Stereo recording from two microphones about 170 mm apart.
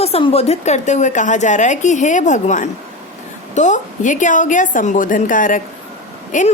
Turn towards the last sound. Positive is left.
turn(degrees=50)  # may be behind; listen again after turning